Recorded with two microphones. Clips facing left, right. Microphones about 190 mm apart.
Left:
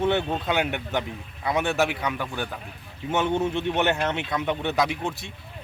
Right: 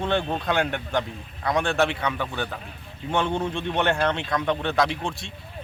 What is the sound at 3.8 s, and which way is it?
Speech, 10° left (ahead or behind).